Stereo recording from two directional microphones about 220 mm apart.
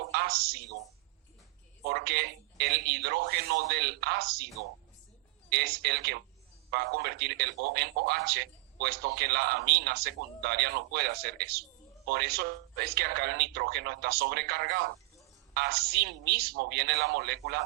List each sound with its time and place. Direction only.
0.0 s a sound: 45° right (ahead or behind)
1.8 s a man's voice: 45° right (ahead or behind)
5.5 s a man's voice: 45° right (ahead or behind)